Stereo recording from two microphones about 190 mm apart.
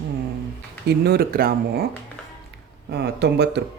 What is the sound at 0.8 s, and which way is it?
Speech, 55° right (ahead or behind).